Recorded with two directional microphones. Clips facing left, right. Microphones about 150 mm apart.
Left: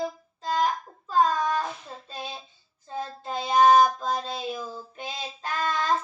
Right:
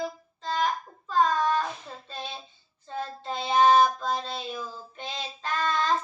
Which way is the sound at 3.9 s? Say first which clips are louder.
Left 1 dB; 40° left (ahead or behind).